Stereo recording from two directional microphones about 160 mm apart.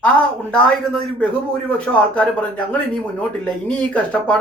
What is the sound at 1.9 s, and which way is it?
Speech, 10° left (ahead or behind).